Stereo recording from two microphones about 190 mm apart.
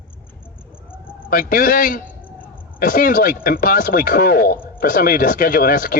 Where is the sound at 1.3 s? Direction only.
50° left (ahead or behind).